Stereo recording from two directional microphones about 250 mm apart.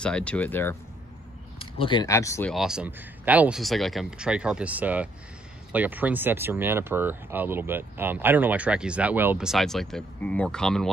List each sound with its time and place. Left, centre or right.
0.0 s speech: centre
1.6 s speech: left
2.5 s speech: centre